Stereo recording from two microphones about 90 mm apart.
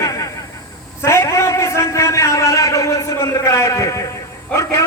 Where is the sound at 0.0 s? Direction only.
40° left (ahead or behind).